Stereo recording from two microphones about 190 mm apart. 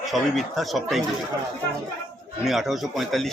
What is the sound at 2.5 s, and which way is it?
Speech, centre (ahead or behind).